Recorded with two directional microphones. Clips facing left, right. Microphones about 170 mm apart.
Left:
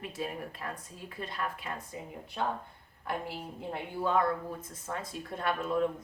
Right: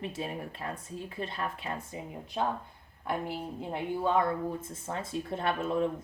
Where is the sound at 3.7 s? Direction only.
20° right (ahead or behind).